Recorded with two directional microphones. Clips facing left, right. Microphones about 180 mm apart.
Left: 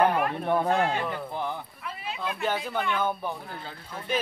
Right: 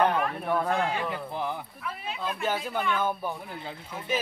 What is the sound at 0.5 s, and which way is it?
Speech, 20° left (ahead or behind).